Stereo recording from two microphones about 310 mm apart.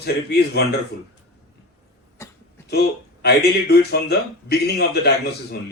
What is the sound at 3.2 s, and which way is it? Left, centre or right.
Speech, left.